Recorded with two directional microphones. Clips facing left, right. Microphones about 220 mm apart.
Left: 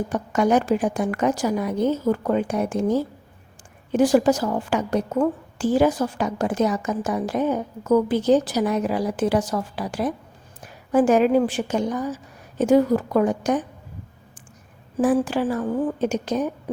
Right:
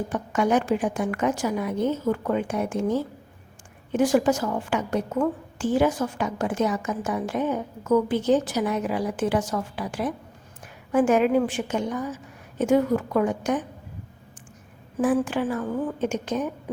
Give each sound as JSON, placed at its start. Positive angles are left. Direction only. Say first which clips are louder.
{"t": 0.1, "sound": "a woman's voice", "louder": "left 3 dB", "side_deg": 40}
{"t": 15.0, "sound": "a woman's voice", "louder": "left 3 dB", "side_deg": 35}